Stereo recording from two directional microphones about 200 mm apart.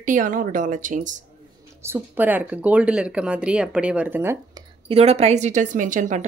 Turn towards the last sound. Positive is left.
turn(degrees=-40)  # may be behind; listen again after turning